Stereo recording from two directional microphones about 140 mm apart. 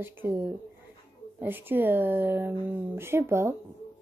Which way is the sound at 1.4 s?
15° right (ahead or behind).